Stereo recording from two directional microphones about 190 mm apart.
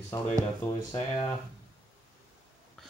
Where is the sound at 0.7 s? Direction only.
20° left (ahead or behind).